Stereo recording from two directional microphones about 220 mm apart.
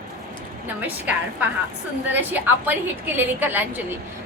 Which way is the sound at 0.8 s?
5° right (ahead or behind).